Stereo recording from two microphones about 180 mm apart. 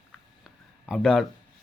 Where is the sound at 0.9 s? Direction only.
Centre (ahead or behind).